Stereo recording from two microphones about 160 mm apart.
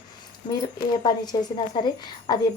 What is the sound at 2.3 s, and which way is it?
Speech, 25° left (ahead or behind).